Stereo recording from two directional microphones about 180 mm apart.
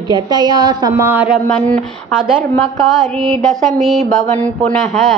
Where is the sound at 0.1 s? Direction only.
25° right (ahead or behind).